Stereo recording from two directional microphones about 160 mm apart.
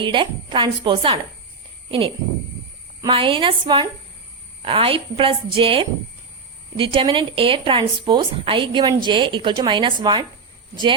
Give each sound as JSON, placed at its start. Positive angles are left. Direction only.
{"t": 0.0, "sound": "speech", "side_deg": -30}